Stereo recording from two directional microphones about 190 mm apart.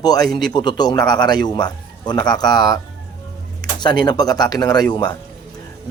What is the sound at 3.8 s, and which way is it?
A man's voice, 20° left (ahead or behind).